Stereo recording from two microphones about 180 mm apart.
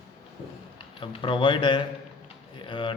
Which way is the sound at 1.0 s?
30° left (ahead or behind).